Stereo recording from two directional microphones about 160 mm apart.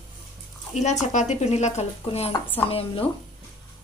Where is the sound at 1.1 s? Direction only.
45° left (ahead or behind).